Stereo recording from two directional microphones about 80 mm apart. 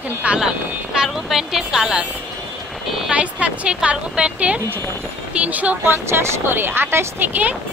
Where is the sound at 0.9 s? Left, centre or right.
Centre.